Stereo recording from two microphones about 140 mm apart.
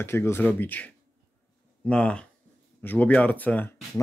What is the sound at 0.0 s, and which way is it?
Speech, 20° left (ahead or behind).